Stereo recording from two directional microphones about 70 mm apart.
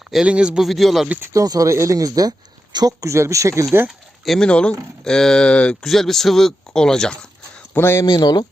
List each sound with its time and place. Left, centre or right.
0.3 s a man's voice: centre
0.6 s speech: centre
1.3 s speech: right
3.0 s speech: right
3.8 s a sound: centre
4.4 s speech: centre
5.9 s speech: centre
7.8 s speech: left
8.0 s speech: left